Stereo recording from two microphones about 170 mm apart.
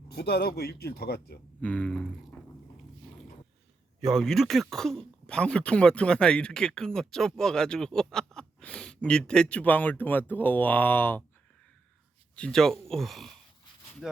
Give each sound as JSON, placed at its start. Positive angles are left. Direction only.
{"t": 0.1, "sound": "speech", "side_deg": 70}
{"t": 1.6, "sound": "speech", "side_deg": 5}
{"t": 4.0, "sound": "speech", "side_deg": 0}
{"t": 12.4, "sound": "speech", "side_deg": 5}